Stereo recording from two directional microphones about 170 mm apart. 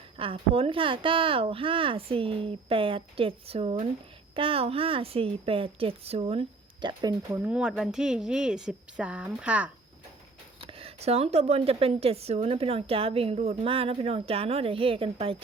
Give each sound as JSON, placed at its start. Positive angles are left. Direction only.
{"t": 0.2, "sound": "a woman's voice", "side_deg": -35}
{"t": 6.8, "sound": "speech", "side_deg": -20}
{"t": 10.7, "sound": "a woman's voice", "side_deg": -35}